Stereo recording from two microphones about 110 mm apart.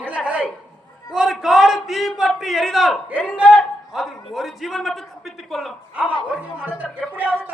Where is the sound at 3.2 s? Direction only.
10° right (ahead or behind).